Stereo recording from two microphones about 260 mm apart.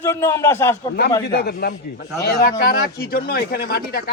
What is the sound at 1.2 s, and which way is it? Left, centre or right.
Speech, left.